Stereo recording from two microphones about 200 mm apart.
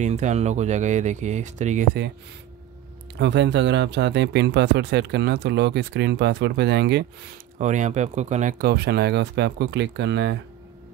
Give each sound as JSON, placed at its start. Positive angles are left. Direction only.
{"t": 0.0, "sound": "speech", "side_deg": -35}
{"t": 3.2, "sound": "speech", "side_deg": -60}
{"t": 7.5, "sound": "speech", "side_deg": -35}